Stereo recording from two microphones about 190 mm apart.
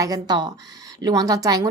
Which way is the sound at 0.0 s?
20° right (ahead or behind).